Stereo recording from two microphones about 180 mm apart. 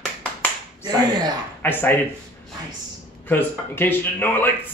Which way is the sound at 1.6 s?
10° left (ahead or behind).